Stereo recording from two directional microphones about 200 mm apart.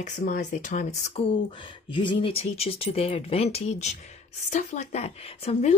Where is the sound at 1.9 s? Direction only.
25° left (ahead or behind).